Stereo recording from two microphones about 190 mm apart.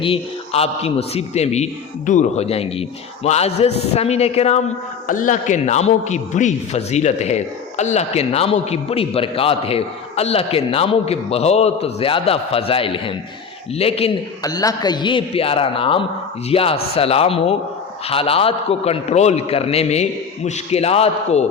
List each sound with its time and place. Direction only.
0.0 s a man's voice: 30° left (ahead or behind)
14.4 s a man's voice: 20° left (ahead or behind)